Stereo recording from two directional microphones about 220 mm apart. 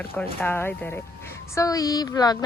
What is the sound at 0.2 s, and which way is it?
Speech, 10° left (ahead or behind).